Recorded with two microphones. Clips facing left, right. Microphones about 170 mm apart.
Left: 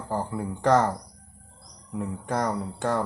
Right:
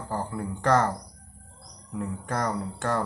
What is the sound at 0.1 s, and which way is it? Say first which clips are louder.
Speech: left 2 dB; 15° left (ahead or behind).